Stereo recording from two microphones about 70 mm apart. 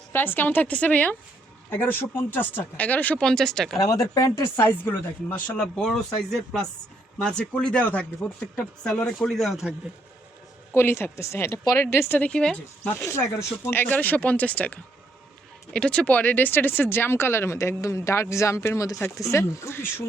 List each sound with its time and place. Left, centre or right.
0.1 s speech: left
3.2 s speech: centre
3.8 s speech: left
4.5 s speech: left
5.5 s speech: centre
9.1 s speech: centre
10.8 s speech: left
12.3 s speech: centre
12.8 s speech: left
13.1 s speech: left
13.8 s speech: left